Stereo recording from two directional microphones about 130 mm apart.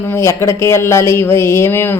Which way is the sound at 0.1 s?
20° left (ahead or behind).